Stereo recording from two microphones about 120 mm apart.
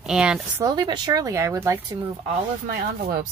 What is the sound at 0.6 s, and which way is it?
Speech, 35° right (ahead or behind).